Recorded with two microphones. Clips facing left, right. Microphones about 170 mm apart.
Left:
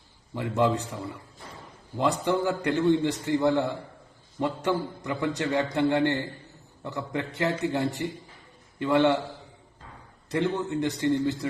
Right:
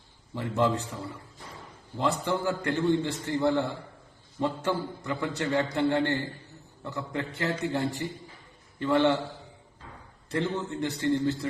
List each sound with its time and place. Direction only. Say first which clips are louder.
0.3 s a man's voice: left 2 dB; 20° left (ahead or behind)
2.0 s a man's voice: left 3 dB; 15° left (ahead or behind)
10.2 s a man's voice: left 3 dB; 15° left (ahead or behind)